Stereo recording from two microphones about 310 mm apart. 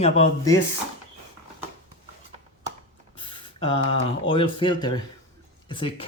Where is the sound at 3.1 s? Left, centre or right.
Centre.